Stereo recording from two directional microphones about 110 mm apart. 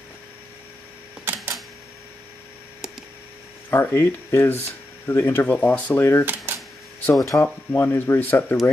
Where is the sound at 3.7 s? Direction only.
20° left (ahead or behind).